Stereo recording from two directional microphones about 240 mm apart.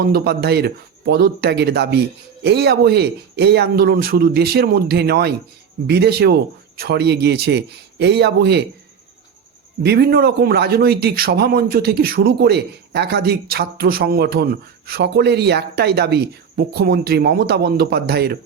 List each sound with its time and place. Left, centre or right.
0.0 s a man's voice: right
9.8 s a man's voice: right